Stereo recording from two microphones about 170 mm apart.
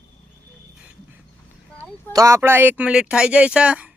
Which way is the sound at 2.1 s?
20° right (ahead or behind).